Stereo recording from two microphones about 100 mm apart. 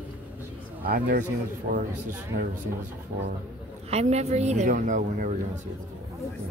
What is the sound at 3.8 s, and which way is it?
Speech, 90° right.